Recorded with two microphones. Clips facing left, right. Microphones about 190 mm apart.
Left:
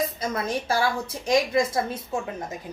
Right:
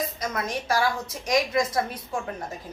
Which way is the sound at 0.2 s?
30° left (ahead or behind).